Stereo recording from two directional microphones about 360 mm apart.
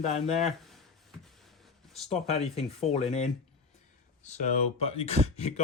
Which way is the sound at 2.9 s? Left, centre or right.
Centre.